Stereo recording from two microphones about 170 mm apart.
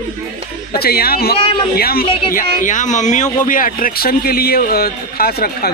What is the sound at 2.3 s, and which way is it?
Speech, 50° left (ahead or behind).